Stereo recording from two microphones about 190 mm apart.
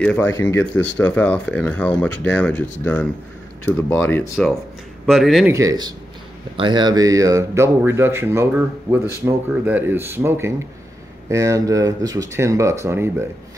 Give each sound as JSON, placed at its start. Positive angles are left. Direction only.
{"t": 0.0, "sound": "speech", "side_deg": 5}
{"t": 5.0, "sound": "speech", "side_deg": 0}
{"t": 5.5, "sound": "speech", "side_deg": -15}